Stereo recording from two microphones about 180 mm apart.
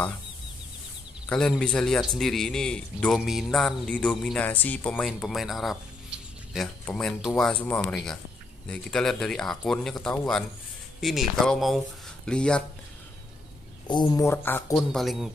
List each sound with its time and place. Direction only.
1.3 s a man's voice: 5° left (ahead or behind)
13.8 s speech: 25° left (ahead or behind)
14.7 s a man's voice: centre (ahead or behind)